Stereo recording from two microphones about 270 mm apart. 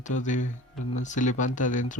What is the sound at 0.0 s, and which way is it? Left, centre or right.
Speech, left.